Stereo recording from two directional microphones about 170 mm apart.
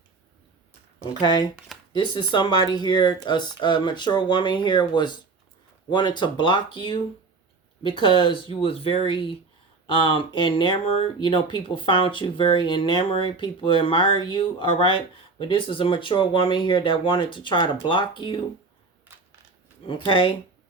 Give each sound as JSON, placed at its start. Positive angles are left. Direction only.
{"t": 1.2, "sound": "speech", "side_deg": 25}
{"t": 20.1, "sound": "speech", "side_deg": 30}